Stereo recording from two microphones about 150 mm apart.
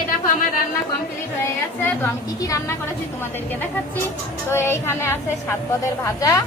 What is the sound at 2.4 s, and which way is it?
Speech, 20° left (ahead or behind).